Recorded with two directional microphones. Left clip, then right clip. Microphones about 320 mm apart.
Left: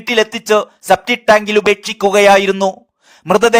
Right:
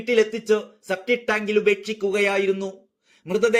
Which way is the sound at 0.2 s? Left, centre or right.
Left.